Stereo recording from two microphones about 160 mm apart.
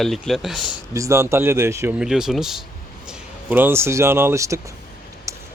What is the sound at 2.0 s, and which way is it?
Speech, 5° right (ahead or behind).